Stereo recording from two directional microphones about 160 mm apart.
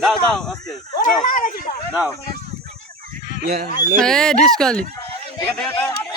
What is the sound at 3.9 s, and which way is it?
Speech, 5° left (ahead or behind).